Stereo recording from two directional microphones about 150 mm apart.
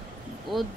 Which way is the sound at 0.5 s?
Centre (ahead or behind).